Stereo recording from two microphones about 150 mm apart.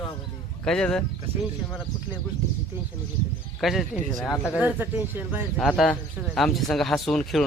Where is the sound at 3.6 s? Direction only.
Centre (ahead or behind).